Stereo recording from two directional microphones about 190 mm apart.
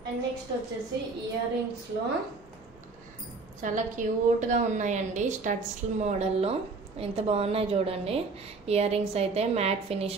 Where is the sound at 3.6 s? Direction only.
40° right (ahead or behind).